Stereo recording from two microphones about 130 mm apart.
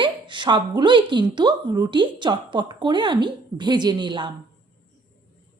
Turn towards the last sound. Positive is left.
turn(degrees=-35)  # may be behind; listen again after turning